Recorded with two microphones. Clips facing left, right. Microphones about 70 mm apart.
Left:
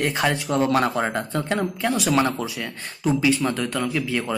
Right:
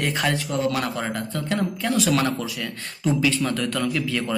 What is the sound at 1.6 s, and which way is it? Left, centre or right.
Speech, centre.